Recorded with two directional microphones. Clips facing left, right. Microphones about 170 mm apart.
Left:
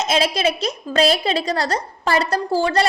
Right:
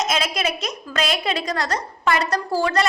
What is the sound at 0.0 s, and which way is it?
A woman's voice, 30° left (ahead or behind).